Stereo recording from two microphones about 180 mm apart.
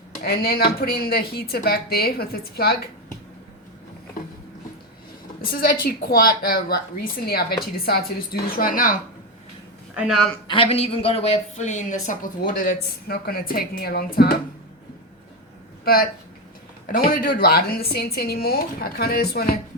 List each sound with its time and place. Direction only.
0.2 s speech: 60° left (ahead or behind)
5.4 s a woman's voice: 55° left (ahead or behind)
9.9 s speech: 5° right (ahead or behind)
10.5 s a woman's voice: 30° left (ahead or behind); by 14.3 s 60° left (ahead or behind)
15.8 s speech: 55° left (ahead or behind)